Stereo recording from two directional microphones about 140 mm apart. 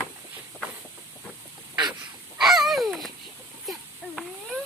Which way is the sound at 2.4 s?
Centre (ahead or behind).